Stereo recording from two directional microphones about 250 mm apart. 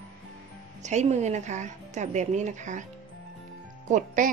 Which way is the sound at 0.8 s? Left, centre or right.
Right.